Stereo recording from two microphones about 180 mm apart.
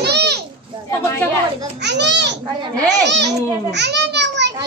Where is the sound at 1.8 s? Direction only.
75° right (ahead or behind).